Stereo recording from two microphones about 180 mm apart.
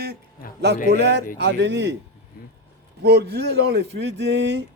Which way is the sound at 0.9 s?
70° right (ahead or behind).